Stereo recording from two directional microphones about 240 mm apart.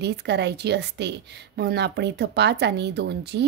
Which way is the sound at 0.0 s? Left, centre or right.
Right.